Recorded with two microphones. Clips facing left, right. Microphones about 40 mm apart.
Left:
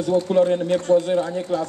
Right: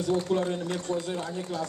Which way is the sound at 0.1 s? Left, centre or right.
Left.